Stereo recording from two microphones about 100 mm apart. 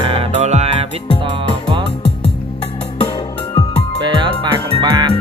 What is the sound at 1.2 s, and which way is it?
Music, 60° right (ahead or behind).